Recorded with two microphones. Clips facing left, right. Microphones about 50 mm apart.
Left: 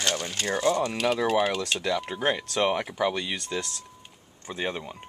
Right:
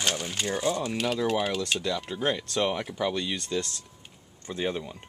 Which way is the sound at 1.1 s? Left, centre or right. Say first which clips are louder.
Left 2 dB; centre.